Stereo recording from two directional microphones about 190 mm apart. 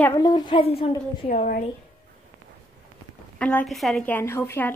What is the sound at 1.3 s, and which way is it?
Speech, 45° left (ahead or behind).